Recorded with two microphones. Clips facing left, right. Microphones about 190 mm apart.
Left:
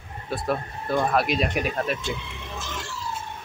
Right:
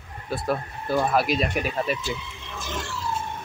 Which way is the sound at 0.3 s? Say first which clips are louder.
Even; centre (ahead or behind).